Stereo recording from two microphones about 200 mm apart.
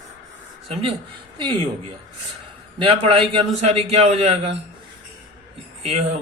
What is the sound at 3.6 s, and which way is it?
Speech, 30° right (ahead or behind).